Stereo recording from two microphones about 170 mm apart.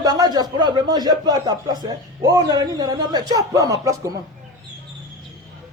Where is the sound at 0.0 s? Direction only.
25° right (ahead or behind).